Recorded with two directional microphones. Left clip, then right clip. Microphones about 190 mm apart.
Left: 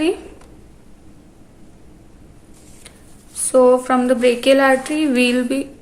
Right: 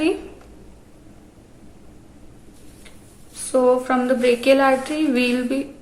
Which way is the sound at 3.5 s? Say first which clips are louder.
Left 4 dB; 35° left (ahead or behind).